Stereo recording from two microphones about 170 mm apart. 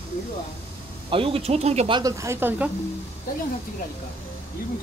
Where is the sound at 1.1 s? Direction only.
35° right (ahead or behind).